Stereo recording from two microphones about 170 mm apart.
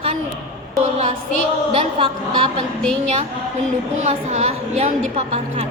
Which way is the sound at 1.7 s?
30° right (ahead or behind).